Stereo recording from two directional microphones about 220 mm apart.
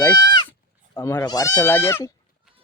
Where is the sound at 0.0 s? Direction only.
10° left (ahead or behind).